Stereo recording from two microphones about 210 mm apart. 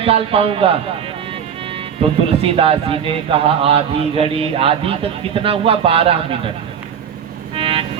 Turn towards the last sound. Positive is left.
turn(degrees=-25)  # may be behind; listen again after turning